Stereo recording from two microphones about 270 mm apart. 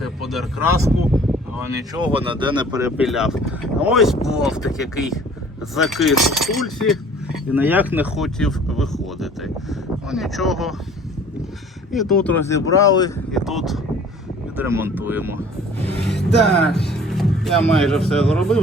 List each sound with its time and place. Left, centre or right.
0.0 s a sound: centre
1.9 s speech: centre
2.1 s speech: centre
3.0 s speech: centre
11.9 s speech: centre
13.3 s speech: centre
16.0 s speech: centre